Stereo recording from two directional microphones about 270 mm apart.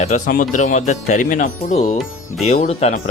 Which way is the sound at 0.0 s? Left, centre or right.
Left.